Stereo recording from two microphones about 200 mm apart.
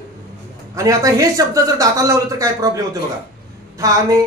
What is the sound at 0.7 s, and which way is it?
A man's voice, 15° right (ahead or behind).